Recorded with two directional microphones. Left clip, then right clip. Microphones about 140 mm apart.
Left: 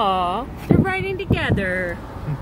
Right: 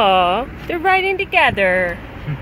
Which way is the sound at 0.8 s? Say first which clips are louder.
Right 8 dB; 25° right (ahead or behind).